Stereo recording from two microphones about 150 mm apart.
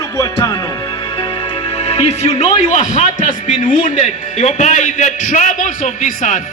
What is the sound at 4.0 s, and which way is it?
A man's voice, 50° left (ahead or behind).